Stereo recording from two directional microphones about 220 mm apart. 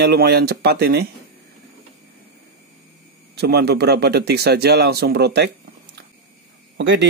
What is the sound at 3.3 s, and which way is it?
Speech, 45° right (ahead or behind).